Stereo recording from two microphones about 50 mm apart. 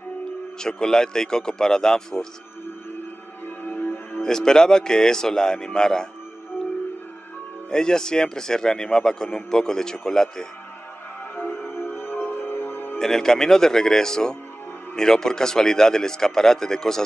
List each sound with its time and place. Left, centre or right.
0.6 s speech: centre
3.4 s music: left
4.2 s speech: centre
7.7 s speech: centre
11.3 s music: left
13.0 s speech: centre